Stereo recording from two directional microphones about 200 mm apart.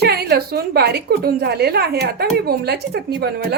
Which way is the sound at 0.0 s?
55° right (ahead or behind).